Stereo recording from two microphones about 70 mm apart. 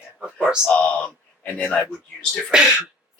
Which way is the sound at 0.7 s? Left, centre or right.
Centre.